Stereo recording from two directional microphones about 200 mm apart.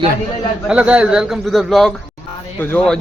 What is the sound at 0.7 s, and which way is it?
A man's voice, 5° right (ahead or behind).